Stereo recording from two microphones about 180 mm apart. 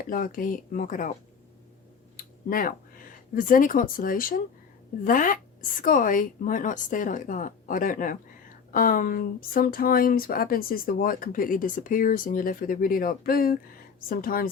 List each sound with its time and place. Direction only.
0.1 s a woman's voice: 50° left (ahead or behind)
2.1 s a sound: 50° left (ahead or behind)
3.3 s a woman's voice: 50° left (ahead or behind)